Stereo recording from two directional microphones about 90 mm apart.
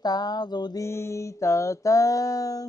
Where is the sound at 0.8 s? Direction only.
30° left (ahead or behind).